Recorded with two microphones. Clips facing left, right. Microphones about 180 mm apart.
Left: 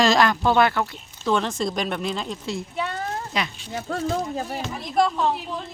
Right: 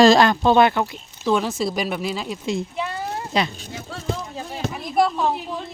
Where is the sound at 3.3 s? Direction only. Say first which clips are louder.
Right 5 dB; 30° right (ahead or behind).